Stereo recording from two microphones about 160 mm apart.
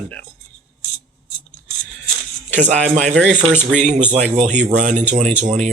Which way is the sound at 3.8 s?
45° right (ahead or behind).